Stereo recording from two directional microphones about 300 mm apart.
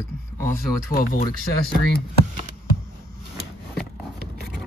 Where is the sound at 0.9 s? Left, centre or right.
Left.